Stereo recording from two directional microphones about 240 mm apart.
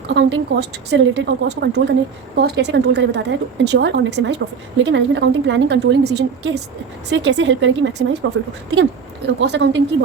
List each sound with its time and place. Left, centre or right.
0.1 s speech: right